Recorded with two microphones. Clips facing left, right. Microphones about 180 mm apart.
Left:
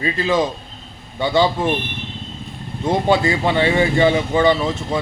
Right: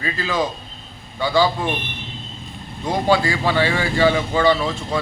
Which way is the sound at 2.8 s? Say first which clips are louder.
Left 2 dB; 25° left (ahead or behind).